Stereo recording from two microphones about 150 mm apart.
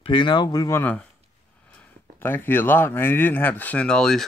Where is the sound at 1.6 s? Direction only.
10° left (ahead or behind).